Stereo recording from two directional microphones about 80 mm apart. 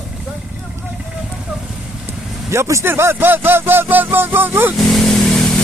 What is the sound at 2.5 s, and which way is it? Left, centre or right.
Speech, right.